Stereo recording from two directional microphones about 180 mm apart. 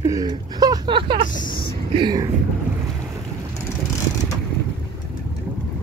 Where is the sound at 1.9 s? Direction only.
25° right (ahead or behind).